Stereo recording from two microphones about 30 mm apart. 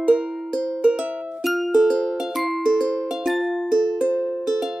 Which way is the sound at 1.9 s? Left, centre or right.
Right.